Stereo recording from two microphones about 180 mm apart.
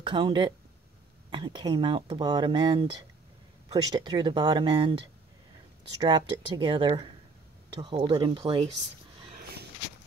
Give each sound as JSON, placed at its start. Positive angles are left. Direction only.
{"t": 0.0, "sound": "speech", "side_deg": -25}
{"t": 5.9, "sound": "speech", "side_deg": -25}